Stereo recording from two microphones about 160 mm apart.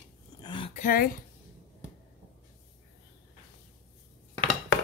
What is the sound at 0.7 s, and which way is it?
Speech, 60° left (ahead or behind).